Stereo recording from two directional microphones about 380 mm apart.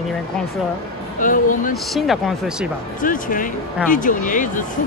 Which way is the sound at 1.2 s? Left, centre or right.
Left.